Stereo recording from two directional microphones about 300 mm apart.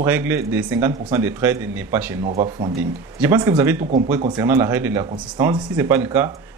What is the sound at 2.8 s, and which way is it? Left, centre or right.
Speech, centre.